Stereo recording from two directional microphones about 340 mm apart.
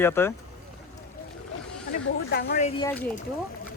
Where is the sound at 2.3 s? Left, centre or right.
Left.